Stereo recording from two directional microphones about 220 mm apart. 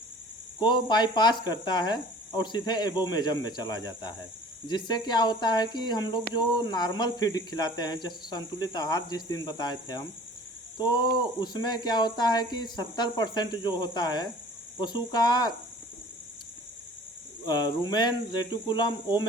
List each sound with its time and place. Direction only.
0.6 s speech: 20° left (ahead or behind)
17.4 s speech: 20° left (ahead or behind)